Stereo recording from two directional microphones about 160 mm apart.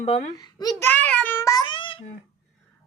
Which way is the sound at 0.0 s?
45° left (ahead or behind).